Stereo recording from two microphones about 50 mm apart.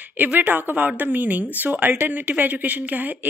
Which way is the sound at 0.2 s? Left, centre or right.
Right.